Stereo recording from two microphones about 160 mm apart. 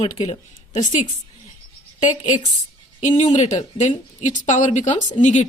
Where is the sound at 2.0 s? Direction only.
50° left (ahead or behind).